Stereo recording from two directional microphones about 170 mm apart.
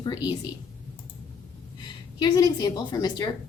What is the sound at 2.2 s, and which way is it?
A woman's voice, 20° left (ahead or behind).